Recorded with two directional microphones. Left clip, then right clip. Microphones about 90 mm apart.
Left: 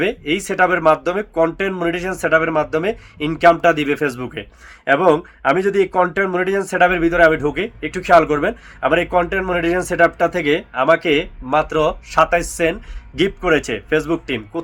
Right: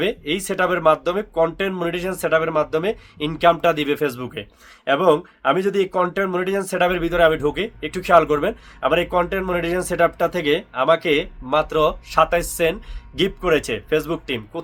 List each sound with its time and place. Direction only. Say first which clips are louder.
0.0 s speech: left 3 dB; 25° right (ahead or behind)